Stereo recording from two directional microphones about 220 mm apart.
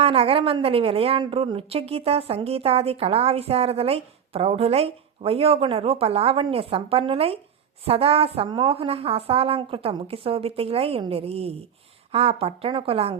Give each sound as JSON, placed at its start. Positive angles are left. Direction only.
{"t": 0.0, "sound": "speech", "side_deg": -25}